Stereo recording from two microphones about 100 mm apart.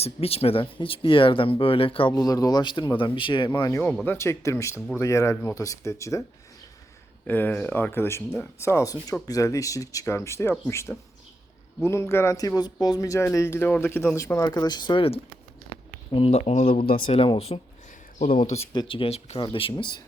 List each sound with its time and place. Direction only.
0.0 s speech: 80° left; by 2.1 s 65° left (ahead or behind)
2.1 s speech: 35° left (ahead or behind)
4.0 s speech: 25° left (ahead or behind)
7.3 s speech: 15° left (ahead or behind); by 15.0 s 45° left (ahead or behind)
16.1 s speech: 75° left (ahead or behind); by 17.6 s 90° left
18.3 s speech: 75° left (ahead or behind)
18.7 s speech: 55° left (ahead or behind); by 19.4 s 85° left
19.4 s speech: 65° left (ahead or behind)
19.7 s speech: 50° left (ahead or behind)